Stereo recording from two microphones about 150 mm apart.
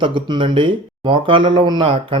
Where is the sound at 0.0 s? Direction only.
35° right (ahead or behind).